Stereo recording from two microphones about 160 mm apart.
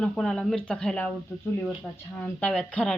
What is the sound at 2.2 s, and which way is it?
Cutlery, 10° left (ahead or behind).